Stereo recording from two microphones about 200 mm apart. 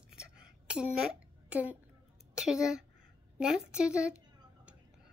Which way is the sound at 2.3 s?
5° right (ahead or behind).